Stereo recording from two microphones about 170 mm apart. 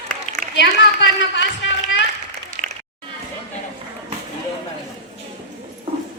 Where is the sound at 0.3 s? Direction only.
45° left (ahead or behind).